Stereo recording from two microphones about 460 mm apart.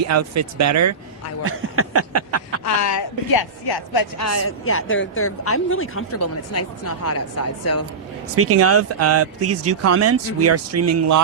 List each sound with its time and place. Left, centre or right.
0.0 s speech: right
1.5 s a sound: right
2.6 s speech: left
3.3 s speech: left
4.2 s speech: left
8.4 s speech: right